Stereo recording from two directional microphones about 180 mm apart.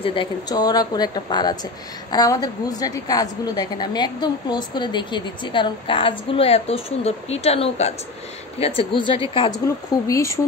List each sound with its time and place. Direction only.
0.0 s a woman's voice: 30° left (ahead or behind)
10.0 s speech: 15° left (ahead or behind)